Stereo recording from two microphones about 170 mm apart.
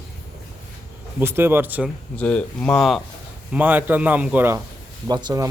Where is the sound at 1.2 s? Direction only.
15° right (ahead or behind).